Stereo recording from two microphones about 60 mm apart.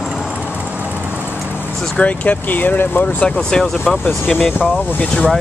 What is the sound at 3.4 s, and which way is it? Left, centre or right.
Speech, centre.